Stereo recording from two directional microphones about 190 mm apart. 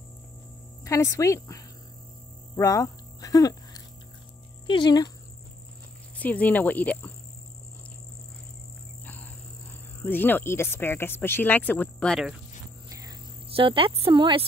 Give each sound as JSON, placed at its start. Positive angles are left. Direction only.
{"t": 0.8, "sound": "speech", "side_deg": 15}
{"t": 2.5, "sound": "hum", "side_deg": 20}
{"t": 4.6, "sound": "speech", "side_deg": 25}
{"t": 6.1, "sound": "speech", "side_deg": 10}
{"t": 10.0, "sound": "speech", "side_deg": 10}
{"t": 12.9, "sound": "cricket", "side_deg": -25}